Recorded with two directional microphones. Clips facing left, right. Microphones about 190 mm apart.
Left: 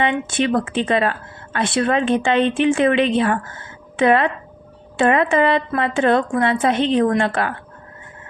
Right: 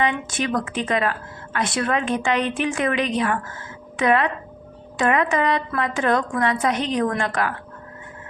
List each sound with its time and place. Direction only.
0.0 s speech: 25° left (ahead or behind)